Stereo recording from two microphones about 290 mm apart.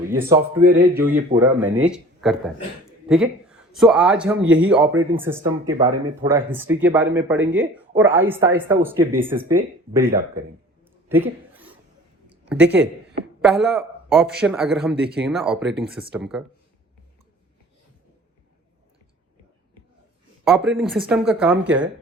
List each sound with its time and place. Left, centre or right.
0.1 s a man's voice: centre
0.6 s speech: right
1.4 s a man's voice: centre
11.1 s a sound: centre
12.3 s speech: centre
20.5 s speech: centre